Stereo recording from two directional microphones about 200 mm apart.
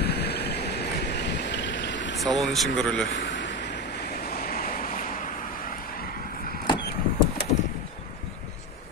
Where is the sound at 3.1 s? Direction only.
65° left (ahead or behind); by 6.6 s 45° left (ahead or behind).